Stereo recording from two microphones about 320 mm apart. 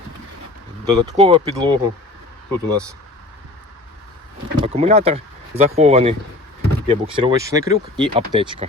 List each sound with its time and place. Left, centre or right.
0.9 s speech: centre
4.6 s speech: centre